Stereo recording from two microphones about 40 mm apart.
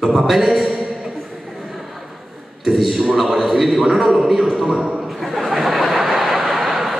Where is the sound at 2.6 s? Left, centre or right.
Centre.